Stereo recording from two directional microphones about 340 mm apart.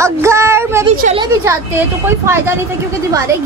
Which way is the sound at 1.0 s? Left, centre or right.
Centre.